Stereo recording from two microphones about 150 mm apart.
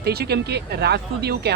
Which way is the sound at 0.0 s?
90° right.